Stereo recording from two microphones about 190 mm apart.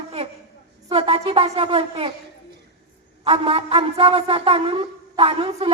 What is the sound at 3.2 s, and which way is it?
A man's voice, 30° right (ahead or behind).